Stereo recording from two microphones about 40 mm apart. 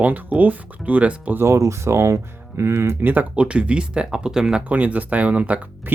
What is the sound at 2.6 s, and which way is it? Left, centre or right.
Speech, right.